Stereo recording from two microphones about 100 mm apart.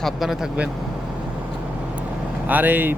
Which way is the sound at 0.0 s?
Centre (ahead or behind).